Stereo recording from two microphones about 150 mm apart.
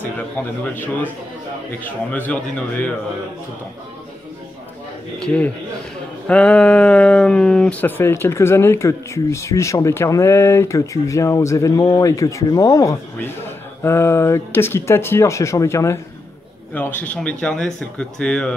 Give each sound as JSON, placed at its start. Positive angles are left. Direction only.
{"t": 0.0, "sound": "speech", "side_deg": 10}
{"t": 2.1, "sound": "speech", "side_deg": 10}
{"t": 5.2, "sound": "speech", "side_deg": 10}